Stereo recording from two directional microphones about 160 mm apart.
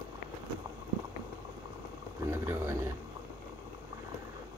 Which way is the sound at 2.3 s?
15° right (ahead or behind).